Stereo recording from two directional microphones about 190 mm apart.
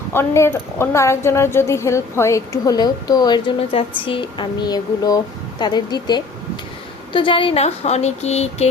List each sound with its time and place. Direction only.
0.1 s a woman's voice: 10° left (ahead or behind); by 8.6 s 35° left (ahead or behind)